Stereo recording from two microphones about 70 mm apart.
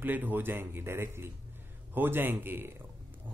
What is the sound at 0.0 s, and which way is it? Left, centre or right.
Speech, right.